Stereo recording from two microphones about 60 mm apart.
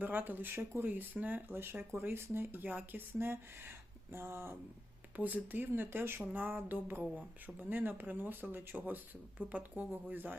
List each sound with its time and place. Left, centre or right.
0.0 s speech: right
0.9 s speech: right
5.1 s speech: right
6.3 s speech: right